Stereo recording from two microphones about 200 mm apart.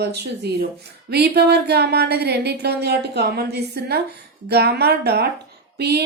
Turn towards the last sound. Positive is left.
turn(degrees=-55)  # may be behind; listen again after turning